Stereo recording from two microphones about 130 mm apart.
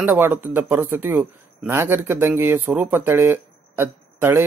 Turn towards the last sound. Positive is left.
turn(degrees=-15)  # may be behind; listen again after turning